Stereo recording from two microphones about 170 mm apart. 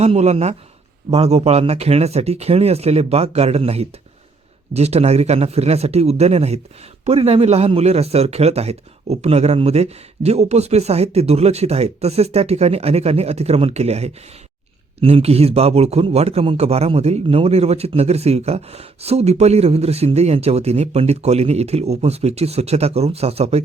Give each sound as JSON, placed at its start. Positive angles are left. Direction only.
{"t": 0.0, "sound": "a man's voice", "side_deg": -40}